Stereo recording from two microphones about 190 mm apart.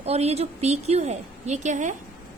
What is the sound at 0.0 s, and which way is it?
A woman's voice, 35° right (ahead or behind).